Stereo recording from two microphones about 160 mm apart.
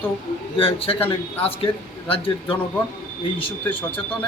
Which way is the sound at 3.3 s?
35° left (ahead or behind).